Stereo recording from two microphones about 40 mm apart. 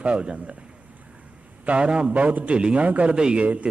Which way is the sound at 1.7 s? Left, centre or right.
Right.